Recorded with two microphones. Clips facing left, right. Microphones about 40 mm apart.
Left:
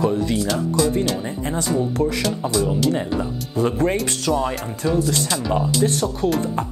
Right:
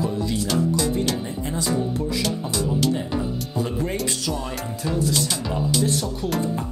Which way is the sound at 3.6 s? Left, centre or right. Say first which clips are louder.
Left 7 dB; left.